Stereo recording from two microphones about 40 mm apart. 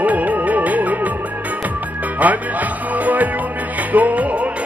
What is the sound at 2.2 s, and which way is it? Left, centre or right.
Speech, right.